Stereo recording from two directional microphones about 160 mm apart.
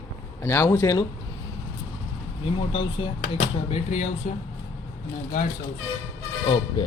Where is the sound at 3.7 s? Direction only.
50° left (ahead or behind).